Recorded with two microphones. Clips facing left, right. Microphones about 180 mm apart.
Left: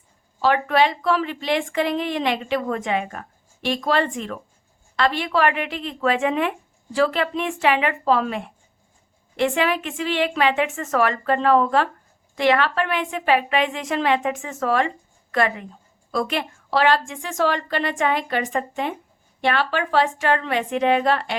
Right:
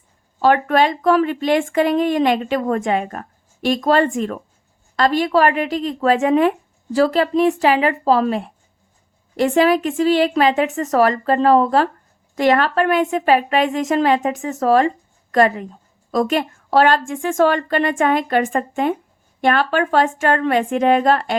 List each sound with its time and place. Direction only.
0.4 s a woman's voice: 45° right (ahead or behind)